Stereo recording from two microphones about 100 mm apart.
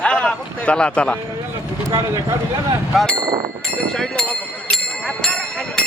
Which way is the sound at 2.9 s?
10° left (ahead or behind).